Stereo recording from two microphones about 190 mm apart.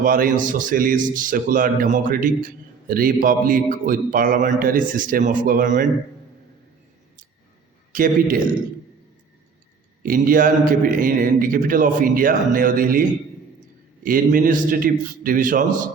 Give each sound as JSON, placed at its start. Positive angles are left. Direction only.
{"t": 0.0, "sound": "a man's voice", "side_deg": -45}
{"t": 7.9, "sound": "a man's voice", "side_deg": -45}
{"t": 10.0, "sound": "a man's voice", "side_deg": -50}